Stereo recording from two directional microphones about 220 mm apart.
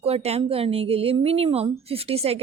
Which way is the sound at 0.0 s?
25° right (ahead or behind).